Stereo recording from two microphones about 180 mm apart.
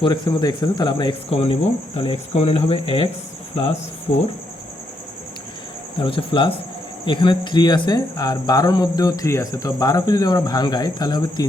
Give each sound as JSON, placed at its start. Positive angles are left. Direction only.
{"t": 0.0, "sound": "speech", "side_deg": 25}
{"t": 6.0, "sound": "speech", "side_deg": 30}